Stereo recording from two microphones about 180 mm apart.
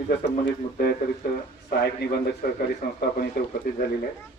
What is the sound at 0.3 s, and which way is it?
A man's voice, 65° left (ahead or behind).